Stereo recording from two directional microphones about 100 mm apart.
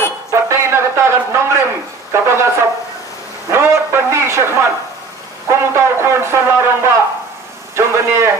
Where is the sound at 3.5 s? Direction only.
25° right (ahead or behind).